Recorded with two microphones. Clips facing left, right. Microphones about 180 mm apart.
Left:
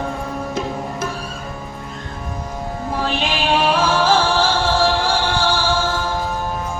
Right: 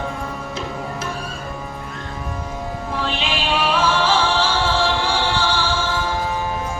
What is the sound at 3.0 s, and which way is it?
Music, 45° left (ahead or behind).